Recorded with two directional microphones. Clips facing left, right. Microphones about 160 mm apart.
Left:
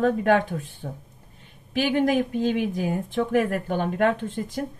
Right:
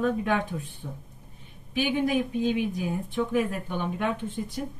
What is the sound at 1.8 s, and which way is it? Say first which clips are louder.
Speech: left 4 dB; 85° left.